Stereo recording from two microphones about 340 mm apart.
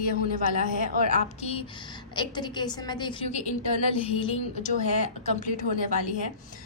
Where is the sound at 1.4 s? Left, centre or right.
Centre.